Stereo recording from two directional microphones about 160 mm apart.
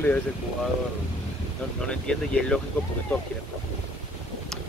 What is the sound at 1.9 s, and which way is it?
Speech, 5° left (ahead or behind).